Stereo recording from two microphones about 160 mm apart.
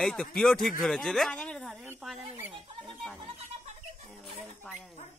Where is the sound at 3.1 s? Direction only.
40° right (ahead or behind).